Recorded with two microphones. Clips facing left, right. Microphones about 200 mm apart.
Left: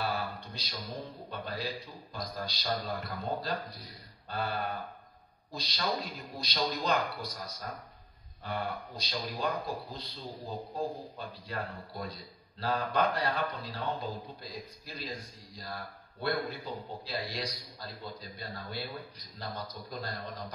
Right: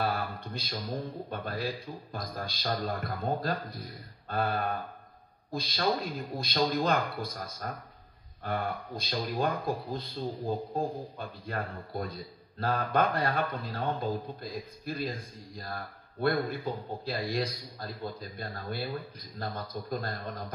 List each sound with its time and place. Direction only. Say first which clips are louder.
0.0 s a man's voice: right 3 dB; 50° right (ahead or behind)